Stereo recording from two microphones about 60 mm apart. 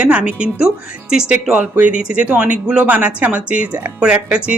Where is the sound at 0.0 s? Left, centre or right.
Right.